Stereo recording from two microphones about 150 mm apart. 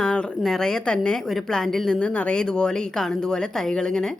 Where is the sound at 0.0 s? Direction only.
5° left (ahead or behind).